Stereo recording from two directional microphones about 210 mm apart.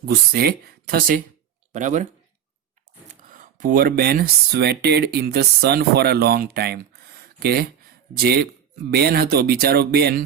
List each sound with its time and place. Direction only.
0.1 s speech: 45° right (ahead or behind)
3.3 s speech: 40° right (ahead or behind)